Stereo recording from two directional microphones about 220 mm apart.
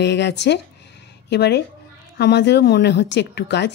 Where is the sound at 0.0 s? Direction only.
50° left (ahead or behind).